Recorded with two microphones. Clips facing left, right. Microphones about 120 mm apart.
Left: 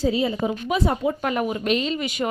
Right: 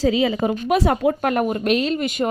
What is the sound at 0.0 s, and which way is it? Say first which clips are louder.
Speech: right 3 dB; 90° right.